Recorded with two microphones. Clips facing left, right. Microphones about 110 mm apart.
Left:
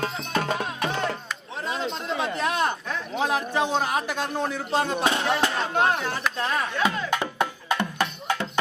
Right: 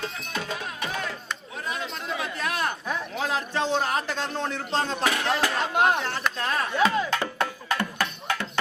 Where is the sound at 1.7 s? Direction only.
30° left (ahead or behind).